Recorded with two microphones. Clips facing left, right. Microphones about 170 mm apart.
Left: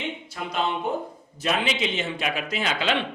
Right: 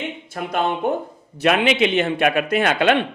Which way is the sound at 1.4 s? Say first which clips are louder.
Right 8 dB; 70° right (ahead or behind).